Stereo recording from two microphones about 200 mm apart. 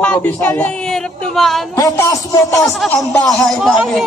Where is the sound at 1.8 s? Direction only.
15° left (ahead or behind).